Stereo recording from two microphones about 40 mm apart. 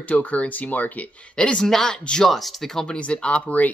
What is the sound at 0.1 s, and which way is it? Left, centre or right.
Speech, left.